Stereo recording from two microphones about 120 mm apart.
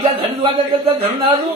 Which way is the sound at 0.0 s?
45° right (ahead or behind).